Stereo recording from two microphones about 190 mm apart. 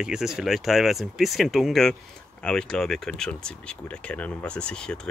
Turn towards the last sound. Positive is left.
turn(degrees=5)  # may be behind; listen again after turning